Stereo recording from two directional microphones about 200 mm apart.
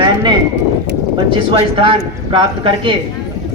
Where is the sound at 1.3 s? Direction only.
25° right (ahead or behind).